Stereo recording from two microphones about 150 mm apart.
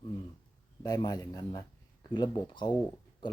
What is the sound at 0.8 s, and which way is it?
Speech, 25° left (ahead or behind).